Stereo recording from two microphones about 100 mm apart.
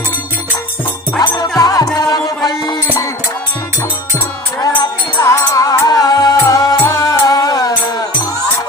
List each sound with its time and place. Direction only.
1.2 s music: 40° left (ahead or behind)
5.2 s music: 35° left (ahead or behind)